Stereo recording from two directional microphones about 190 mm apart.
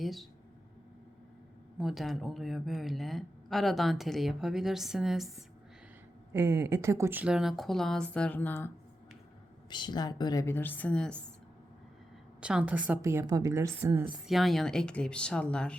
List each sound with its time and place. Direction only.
0.0 s speech: centre (ahead or behind)
1.8 s speech: centre (ahead or behind)
6.3 s speech: 15° right (ahead or behind); by 8.7 s 10° left (ahead or behind)
9.6 s a woman's voice: 25° left (ahead or behind); by 11.1 s 5° left (ahead or behind)
12.4 s a woman's voice: 5° right (ahead or behind)
14.3 s speech: centre (ahead or behind)